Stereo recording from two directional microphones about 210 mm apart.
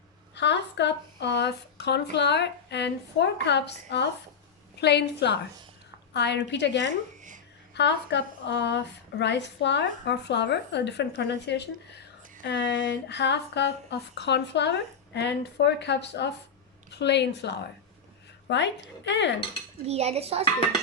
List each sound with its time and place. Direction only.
0.3 s a woman's voice: 55° left (ahead or behind)
7.2 s a sound: 35° right (ahead or behind)
7.7 s a woman's voice: 55° left (ahead or behind)
19.9 s a child's voice: 30° right (ahead or behind)